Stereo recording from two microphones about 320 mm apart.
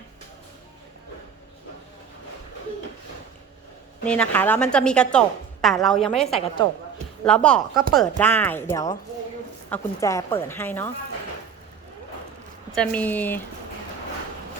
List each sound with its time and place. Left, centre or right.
4.0 s a woman's voice: centre
6.2 s a woman's voice: centre
7.3 s a woman's voice: centre
12.7 s a woman's voice: centre